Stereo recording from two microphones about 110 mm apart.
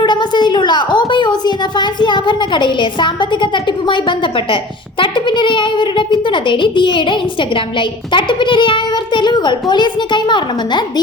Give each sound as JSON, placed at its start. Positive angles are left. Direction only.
{"t": 0.0, "sound": "a woman's voice", "side_deg": 45}